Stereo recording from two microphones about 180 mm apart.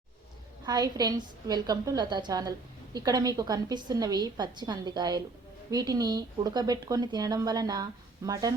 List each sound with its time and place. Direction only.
0.6 s a woman's voice: 20° right (ahead or behind)